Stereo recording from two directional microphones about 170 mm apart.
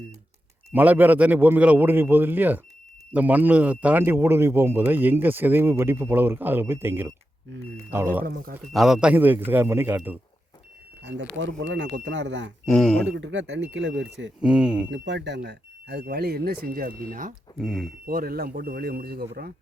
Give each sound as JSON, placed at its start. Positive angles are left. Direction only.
{"t": 0.7, "sound": "speech", "side_deg": -10}
{"t": 8.2, "sound": "speech", "side_deg": -60}
{"t": 8.7, "sound": "speech", "side_deg": 0}
{"t": 11.0, "sound": "speech", "side_deg": -90}
{"t": 12.6, "sound": "speech", "side_deg": 5}
{"t": 13.1, "sound": "speech", "side_deg": -90}
{"t": 14.4, "sound": "speech", "side_deg": -5}
{"t": 14.8, "sound": "speech", "side_deg": -90}
{"t": 17.6, "sound": "speech", "side_deg": 0}
{"t": 18.0, "sound": "speech", "side_deg": -60}